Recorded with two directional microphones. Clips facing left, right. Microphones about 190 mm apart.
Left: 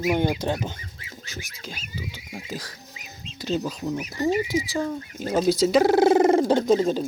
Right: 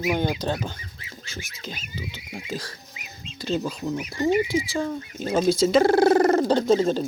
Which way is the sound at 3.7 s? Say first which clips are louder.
Even; centre (ahead or behind).